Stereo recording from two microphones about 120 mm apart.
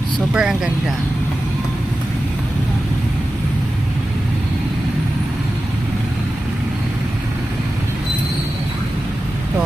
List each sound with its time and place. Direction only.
0.3 s speech: 5° right (ahead or behind)